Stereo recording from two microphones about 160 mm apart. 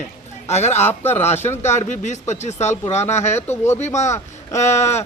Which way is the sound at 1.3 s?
45° left (ahead or behind).